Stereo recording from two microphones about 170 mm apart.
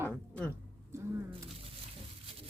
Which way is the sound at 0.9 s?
15° right (ahead or behind).